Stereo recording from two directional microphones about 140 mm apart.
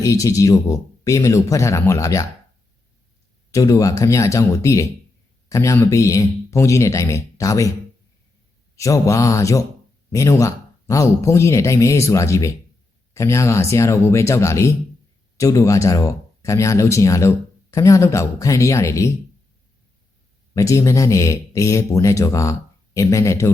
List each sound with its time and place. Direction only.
0.0 s speech: 25° left (ahead or behind)
3.5 s speech: 25° left (ahead or behind)
8.7 s speech: 20° left (ahead or behind)
20.5 s speech: 20° left (ahead or behind)